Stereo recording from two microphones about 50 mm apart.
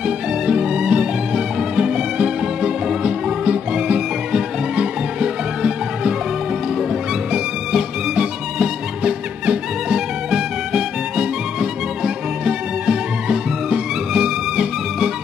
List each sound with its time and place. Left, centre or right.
0.0 s music: centre
7.7 s music: centre